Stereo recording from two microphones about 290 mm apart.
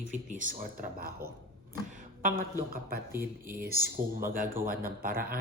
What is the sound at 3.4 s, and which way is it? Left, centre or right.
Speech, right.